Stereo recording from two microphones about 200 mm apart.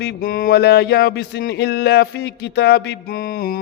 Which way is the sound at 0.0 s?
50° left (ahead or behind).